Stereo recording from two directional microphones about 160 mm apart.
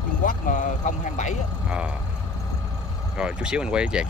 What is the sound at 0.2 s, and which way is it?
Speech, 55° left (ahead or behind).